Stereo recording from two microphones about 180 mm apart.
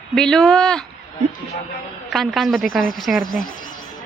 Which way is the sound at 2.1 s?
Centre (ahead or behind).